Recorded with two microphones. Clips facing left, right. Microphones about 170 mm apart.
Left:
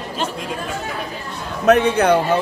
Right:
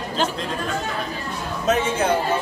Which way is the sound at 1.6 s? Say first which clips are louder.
Left 7 dB; 65° left (ahead or behind).